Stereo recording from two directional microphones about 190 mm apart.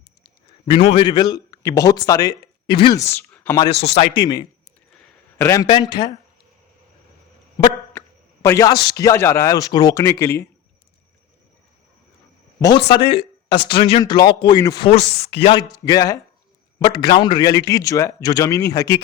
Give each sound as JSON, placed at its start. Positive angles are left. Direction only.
{"t": 0.6, "sound": "a man's voice", "side_deg": 30}
{"t": 3.8, "sound": "speech", "side_deg": 30}
{"t": 7.9, "sound": "a sound", "side_deg": 15}
{"t": 9.0, "sound": "speech", "side_deg": 15}
{"t": 12.5, "sound": "speech", "side_deg": 20}
{"t": 14.8, "sound": "speech", "side_deg": 35}
{"t": 15.7, "sound": "speech", "side_deg": 20}